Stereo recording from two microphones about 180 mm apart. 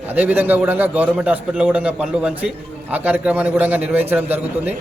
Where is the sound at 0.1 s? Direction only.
10° right (ahead or behind).